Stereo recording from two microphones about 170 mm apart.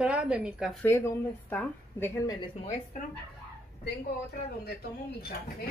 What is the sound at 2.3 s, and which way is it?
Speech, 25° left (ahead or behind).